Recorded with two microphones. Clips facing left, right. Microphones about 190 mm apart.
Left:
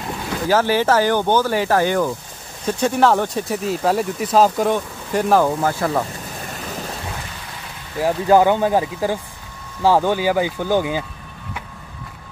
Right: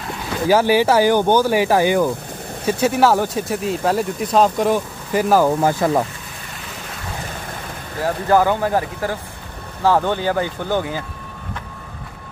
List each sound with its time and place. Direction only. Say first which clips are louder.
0.5 s speech: right 2 dB; 10° right (ahead or behind)
5.6 s speech: right 3 dB; 20° right (ahead or behind)
8.0 s speech: left 2 dB; 15° left (ahead or behind)